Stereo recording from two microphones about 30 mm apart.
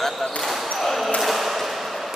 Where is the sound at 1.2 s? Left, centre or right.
Centre.